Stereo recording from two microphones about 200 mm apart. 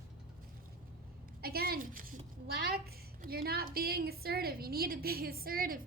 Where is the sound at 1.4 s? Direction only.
50° right (ahead or behind).